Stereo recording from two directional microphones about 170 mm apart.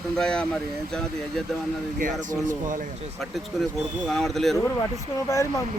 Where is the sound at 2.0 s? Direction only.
55° right (ahead or behind).